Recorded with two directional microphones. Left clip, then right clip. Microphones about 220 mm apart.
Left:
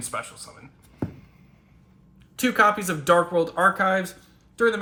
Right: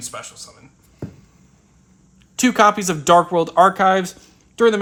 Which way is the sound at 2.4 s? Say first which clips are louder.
Right 5 dB; 20° right (ahead or behind).